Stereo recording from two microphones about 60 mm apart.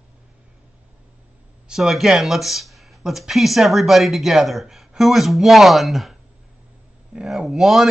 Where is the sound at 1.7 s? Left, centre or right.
Centre.